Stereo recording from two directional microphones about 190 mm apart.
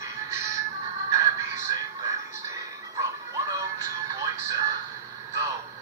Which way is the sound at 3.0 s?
15° right (ahead or behind).